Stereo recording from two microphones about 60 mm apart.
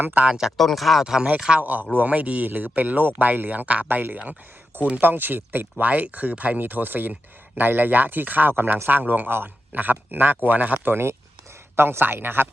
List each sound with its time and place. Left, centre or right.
0.0 s a man's voice: right
0.3 s speech: centre
0.5 s speech: centre
1.6 s speech: right
10.8 s a man's voice: right